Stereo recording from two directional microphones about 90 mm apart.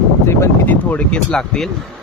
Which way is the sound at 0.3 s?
20° left (ahead or behind).